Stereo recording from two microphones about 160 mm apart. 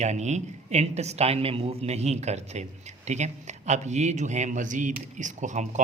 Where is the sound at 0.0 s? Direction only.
45° right (ahead or behind).